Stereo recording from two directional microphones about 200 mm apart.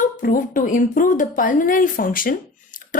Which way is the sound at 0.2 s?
45° left (ahead or behind).